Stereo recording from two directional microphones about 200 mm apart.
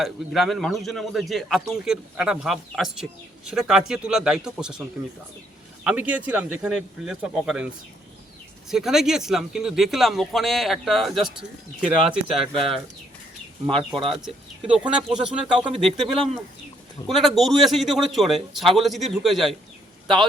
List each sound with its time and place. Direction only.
0.0 s a man's voice: centre (ahead or behind)
5.8 s a man's voice: 5° right (ahead or behind)
8.7 s a man's voice: centre (ahead or behind)
13.7 s speech: 25° right (ahead or behind)
14.2 s a man's voice: 5° right (ahead or behind)
16.0 s speech: 25° right (ahead or behind)
17.1 s a man's voice: centre (ahead or behind)